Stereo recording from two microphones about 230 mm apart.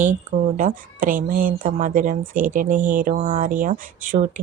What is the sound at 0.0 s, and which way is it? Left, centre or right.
Speech, right.